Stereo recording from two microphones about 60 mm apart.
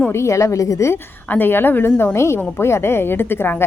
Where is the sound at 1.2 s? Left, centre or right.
Left.